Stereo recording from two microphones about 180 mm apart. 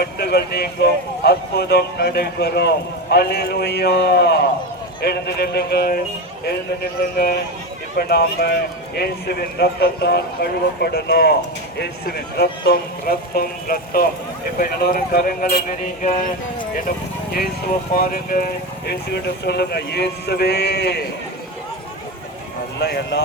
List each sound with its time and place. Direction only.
0.0 s speech: 60° left (ahead or behind)
7.9 s speech: 60° left (ahead or behind)
17.9 s speech: 50° left (ahead or behind)
18.9 s speech: 65° left (ahead or behind)
22.8 s speech: 65° left (ahead or behind)